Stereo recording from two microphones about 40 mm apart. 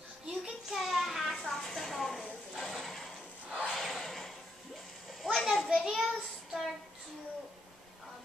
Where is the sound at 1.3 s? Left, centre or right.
Centre.